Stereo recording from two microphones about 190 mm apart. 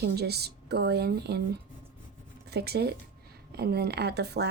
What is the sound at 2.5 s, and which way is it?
Speech, 60° right (ahead or behind).